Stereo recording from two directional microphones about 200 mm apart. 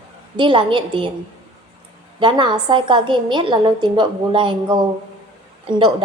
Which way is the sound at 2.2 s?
25° right (ahead or behind).